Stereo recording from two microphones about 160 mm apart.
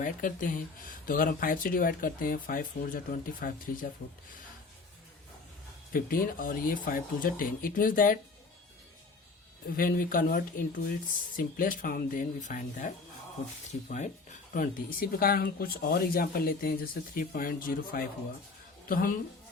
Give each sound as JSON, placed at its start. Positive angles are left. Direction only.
{"t": 0.0, "sound": "speech", "side_deg": 55}
{"t": 5.9, "sound": "speech", "side_deg": 65}
{"t": 9.7, "sound": "speech", "side_deg": 60}
{"t": 14.5, "sound": "speech", "side_deg": 60}